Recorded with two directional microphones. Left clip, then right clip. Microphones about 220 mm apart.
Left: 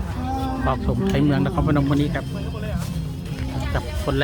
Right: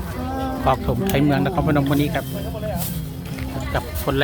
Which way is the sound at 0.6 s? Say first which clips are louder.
Right 7 dB; 10° right (ahead or behind).